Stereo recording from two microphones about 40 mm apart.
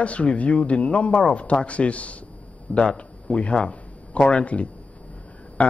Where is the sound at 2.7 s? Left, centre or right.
Left.